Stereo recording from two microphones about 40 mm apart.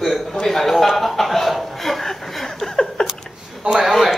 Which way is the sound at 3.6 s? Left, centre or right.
Right.